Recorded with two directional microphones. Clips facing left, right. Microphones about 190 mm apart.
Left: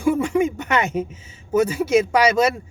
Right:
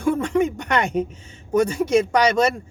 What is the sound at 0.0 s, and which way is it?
Speech, 10° left (ahead or behind).